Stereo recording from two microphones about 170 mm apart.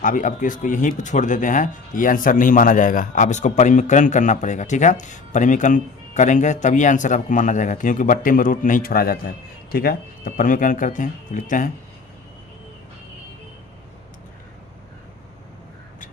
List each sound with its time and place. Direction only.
0.0 s speech: 50° left (ahead or behind)